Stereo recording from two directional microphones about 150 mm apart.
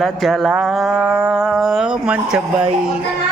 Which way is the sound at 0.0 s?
Centre (ahead or behind).